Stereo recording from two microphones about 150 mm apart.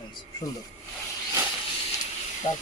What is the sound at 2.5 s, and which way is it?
Speech, 50° left (ahead or behind).